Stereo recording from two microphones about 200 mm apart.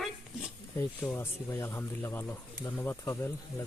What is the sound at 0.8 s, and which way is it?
Speech, 10° left (ahead or behind).